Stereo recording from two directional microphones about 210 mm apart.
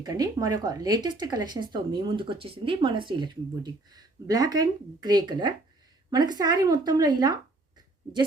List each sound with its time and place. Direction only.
0.0 s speech: 20° right (ahead or behind)